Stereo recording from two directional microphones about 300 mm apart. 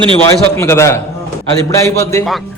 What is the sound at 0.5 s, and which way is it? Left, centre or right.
Speech, centre.